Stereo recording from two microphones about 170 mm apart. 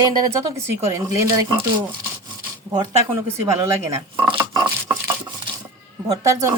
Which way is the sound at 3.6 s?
20° right (ahead or behind).